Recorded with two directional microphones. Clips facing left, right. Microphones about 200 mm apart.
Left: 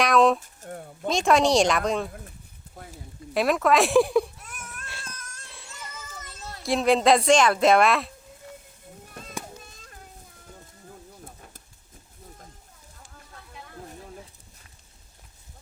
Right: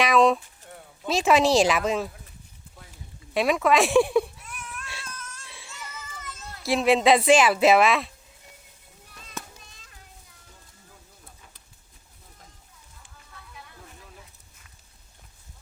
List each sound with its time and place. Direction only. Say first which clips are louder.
0.0 s a sound: even; centre (ahead or behind)
0.3 s a sound: left 7 dB; 45° left (ahead or behind)
1.0 s speech: even; 5° right (ahead or behind)
3.3 s speech: even; centre (ahead or behind)
4.4 s crying: right 2 dB; 45° left (ahead or behind)
5.0 s cat: right 2 dB; 40° left (ahead or behind)
5.5 s baby cry: even; centre (ahead or behind)
6.1 s children playing: left 1 dB; 35° left (ahead or behind)
6.6 s speech: even; centre (ahead or behind)
9.0 s children playing: left 3 dB; 50° left (ahead or behind)
11.3 s horse: left 6 dB; 50° left (ahead or behind)
13.7 s a sound: left 7 dB; 45° left (ahead or behind)